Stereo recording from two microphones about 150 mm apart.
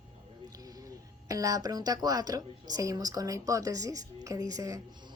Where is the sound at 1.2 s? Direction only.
25° right (ahead or behind).